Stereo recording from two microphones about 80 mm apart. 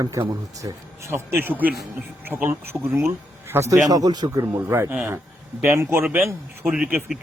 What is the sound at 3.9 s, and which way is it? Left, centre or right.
Speech, right.